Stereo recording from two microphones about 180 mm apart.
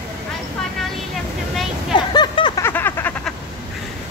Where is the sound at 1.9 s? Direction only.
25° left (ahead or behind).